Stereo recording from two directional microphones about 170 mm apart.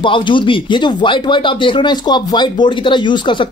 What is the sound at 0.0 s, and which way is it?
Speech, 30° left (ahead or behind).